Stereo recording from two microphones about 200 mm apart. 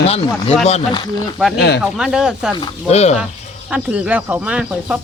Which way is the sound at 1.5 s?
55° left (ahead or behind).